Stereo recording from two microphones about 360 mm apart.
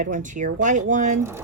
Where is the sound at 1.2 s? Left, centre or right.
Centre.